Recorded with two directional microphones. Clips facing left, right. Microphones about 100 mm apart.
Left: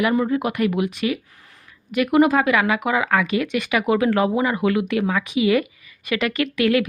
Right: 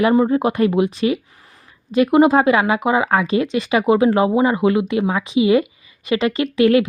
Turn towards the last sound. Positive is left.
turn(degrees=-30)  # may be behind; listen again after turning